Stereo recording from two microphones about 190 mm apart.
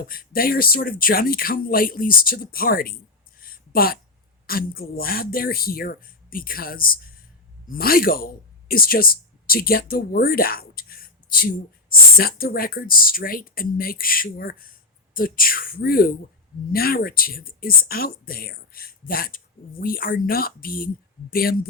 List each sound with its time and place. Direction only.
0.1 s speech: 50° left (ahead or behind)
3.4 s a sound: 50° left (ahead or behind)
4.4 s speech: 50° left (ahead or behind)